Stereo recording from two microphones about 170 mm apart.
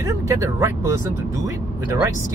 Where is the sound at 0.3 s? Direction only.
20° right (ahead or behind).